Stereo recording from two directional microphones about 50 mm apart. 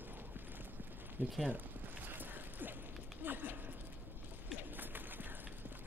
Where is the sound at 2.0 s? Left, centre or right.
Right.